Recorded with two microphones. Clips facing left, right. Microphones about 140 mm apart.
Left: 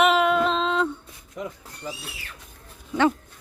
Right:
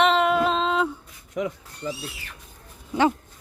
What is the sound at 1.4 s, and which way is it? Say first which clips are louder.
Speech: right 6 dB; 85° right.